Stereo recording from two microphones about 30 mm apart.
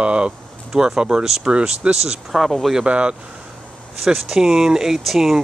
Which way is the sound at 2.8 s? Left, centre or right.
Right.